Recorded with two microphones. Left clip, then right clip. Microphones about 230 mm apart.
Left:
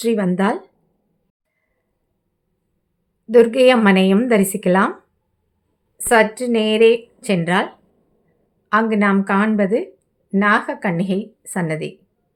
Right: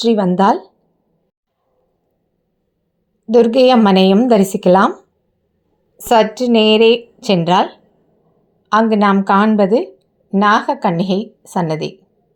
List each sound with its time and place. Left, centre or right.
0.2 s a woman's voice: centre
3.3 s a woman's voice: centre
10.8 s speech: centre
11.4 s a woman's voice: centre